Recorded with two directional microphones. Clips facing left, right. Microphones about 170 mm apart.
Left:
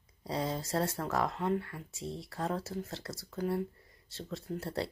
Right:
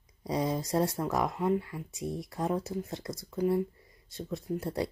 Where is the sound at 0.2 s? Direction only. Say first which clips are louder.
Right 4 dB; 15° right (ahead or behind).